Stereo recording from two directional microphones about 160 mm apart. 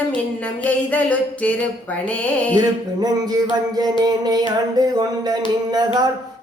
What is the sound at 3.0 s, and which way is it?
Speech, 25° right (ahead or behind).